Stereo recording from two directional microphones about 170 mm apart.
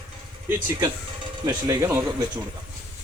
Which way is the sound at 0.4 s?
15° right (ahead or behind).